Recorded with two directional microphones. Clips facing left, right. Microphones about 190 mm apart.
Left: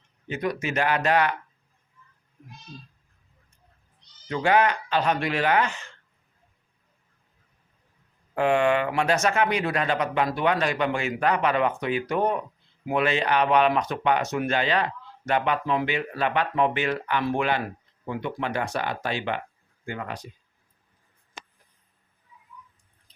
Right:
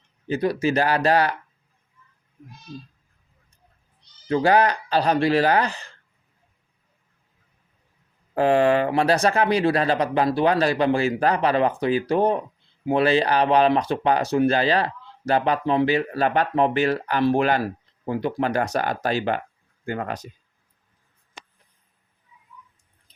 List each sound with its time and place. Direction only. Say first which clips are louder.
0.3 s speech: right 6 dB; 35° right (ahead or behind)
4.3 s speech: right 3 dB; 35° right (ahead or behind)
8.4 s speech: right 4 dB; 35° right (ahead or behind)